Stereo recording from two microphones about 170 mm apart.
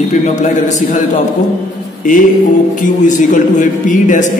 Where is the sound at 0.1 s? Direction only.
45° left (ahead or behind).